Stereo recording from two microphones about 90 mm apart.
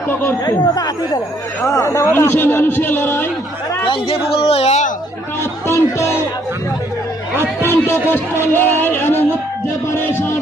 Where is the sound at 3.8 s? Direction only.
75° left (ahead or behind).